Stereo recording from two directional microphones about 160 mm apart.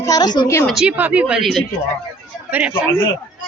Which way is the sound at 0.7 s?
5° right (ahead or behind).